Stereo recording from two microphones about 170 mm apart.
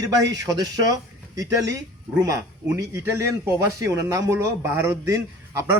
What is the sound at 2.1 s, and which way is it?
A man's voice, 20° right (ahead or behind).